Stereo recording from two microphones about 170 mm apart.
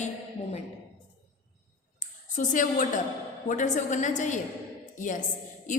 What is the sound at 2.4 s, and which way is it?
A man's voice, 50° left (ahead or behind).